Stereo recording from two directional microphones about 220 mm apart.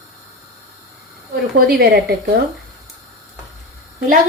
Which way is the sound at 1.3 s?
45° right (ahead or behind).